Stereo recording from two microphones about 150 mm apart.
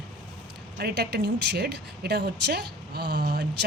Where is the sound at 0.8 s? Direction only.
90° right.